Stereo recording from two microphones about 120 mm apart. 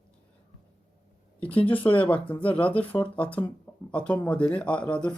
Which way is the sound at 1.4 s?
10° left (ahead or behind).